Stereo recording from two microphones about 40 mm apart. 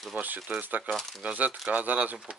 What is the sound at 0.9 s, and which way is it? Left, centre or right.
Speech, centre.